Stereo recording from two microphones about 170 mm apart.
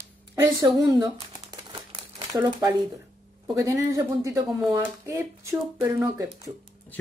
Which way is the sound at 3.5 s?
20° right (ahead or behind).